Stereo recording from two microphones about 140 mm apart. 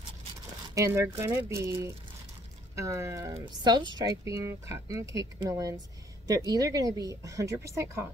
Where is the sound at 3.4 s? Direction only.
30° right (ahead or behind).